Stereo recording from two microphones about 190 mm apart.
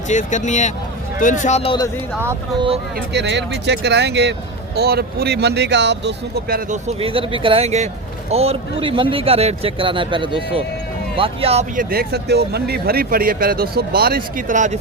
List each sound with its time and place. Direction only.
0.1 s speech: 40° left (ahead or behind)
3.1 s speech: 65° right (ahead or behind)
6.7 s speech: 30° right (ahead or behind)
11.8 s speech: 55° right (ahead or behind)